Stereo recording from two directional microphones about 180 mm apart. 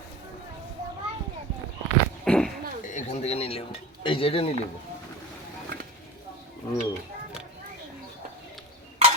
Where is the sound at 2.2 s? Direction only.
5° left (ahead or behind).